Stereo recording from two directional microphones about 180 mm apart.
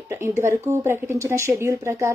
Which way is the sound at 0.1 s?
15° right (ahead or behind).